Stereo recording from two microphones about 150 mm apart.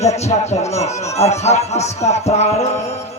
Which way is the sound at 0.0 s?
45° left (ahead or behind).